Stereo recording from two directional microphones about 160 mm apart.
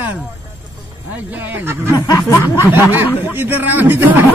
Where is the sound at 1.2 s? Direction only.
10° right (ahead or behind).